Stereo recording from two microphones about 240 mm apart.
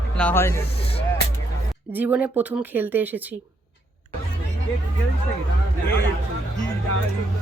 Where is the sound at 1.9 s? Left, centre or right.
Centre.